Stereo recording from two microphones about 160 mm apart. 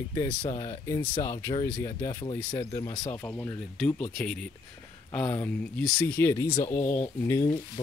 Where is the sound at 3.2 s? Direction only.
15° left (ahead or behind).